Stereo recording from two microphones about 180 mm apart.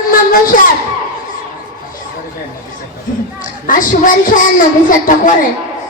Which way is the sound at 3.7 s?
50° left (ahead or behind).